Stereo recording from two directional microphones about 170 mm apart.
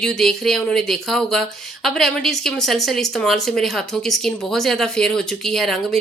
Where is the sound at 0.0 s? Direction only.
Centre (ahead or behind).